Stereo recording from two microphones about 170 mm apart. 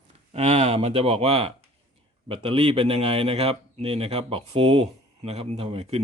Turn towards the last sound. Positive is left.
turn(degrees=-35)  # may be behind; listen again after turning